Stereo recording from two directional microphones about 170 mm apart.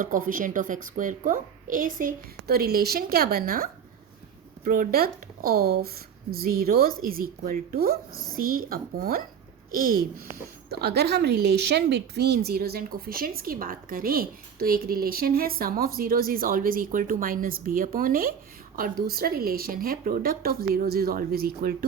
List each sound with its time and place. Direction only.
0.0 s a woman's voice: 55° right (ahead or behind)
10.7 s speech: 70° right (ahead or behind)